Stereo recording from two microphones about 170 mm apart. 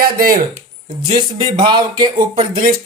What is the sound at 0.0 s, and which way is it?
Speech, 55° right (ahead or behind).